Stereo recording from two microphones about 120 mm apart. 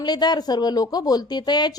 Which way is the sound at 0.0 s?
35° left (ahead or behind).